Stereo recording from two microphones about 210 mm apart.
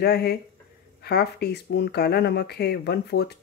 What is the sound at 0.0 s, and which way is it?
Speech, 50° left (ahead or behind).